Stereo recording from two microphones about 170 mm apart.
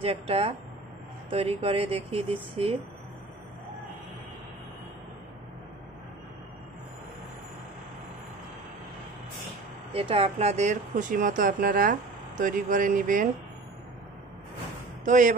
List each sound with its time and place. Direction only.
0.0 s speech: 35° right (ahead or behind)
9.9 s speech: 35° right (ahead or behind); by 13.3 s 50° right (ahead or behind)
15.0 s speech: 50° right (ahead or behind)